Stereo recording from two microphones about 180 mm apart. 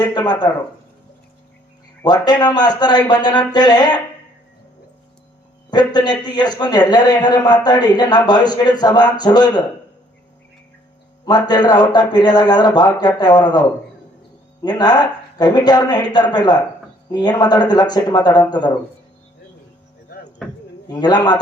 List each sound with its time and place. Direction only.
0.0 s a man's voice: 25° left (ahead or behind)
2.0 s a man's voice: 20° left (ahead or behind)
5.7 s a man's voice: 25° left (ahead or behind)
11.3 s a man's voice: 25° left (ahead or behind)
20.4 s a sound: 5° left (ahead or behind)
20.9 s a man's voice: 25° left (ahead or behind)